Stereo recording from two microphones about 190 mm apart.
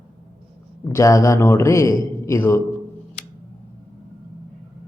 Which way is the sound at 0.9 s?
15° left (ahead or behind).